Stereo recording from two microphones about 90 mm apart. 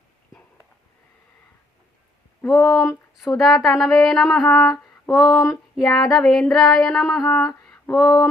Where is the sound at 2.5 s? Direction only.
5° left (ahead or behind).